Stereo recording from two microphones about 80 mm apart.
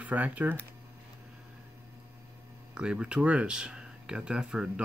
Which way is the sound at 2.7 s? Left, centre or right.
Centre.